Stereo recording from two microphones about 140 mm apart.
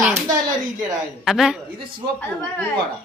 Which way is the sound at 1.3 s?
5° right (ahead or behind).